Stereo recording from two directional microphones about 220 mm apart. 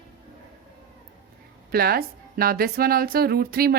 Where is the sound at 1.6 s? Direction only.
45° right (ahead or behind).